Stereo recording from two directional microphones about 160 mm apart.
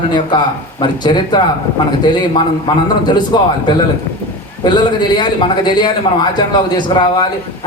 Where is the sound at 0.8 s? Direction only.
25° left (ahead or behind).